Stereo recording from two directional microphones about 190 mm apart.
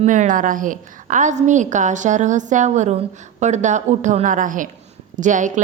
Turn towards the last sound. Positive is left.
turn(degrees=-40)  # may be behind; listen again after turning